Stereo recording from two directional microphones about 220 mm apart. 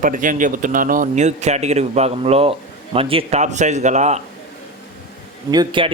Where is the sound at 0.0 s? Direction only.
35° right (ahead or behind).